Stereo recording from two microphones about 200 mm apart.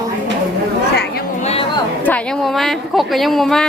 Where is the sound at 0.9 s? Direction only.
55° left (ahead or behind).